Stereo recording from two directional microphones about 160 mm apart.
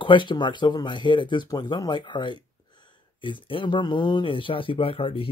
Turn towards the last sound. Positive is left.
turn(degrees=35)  # may be behind; listen again after turning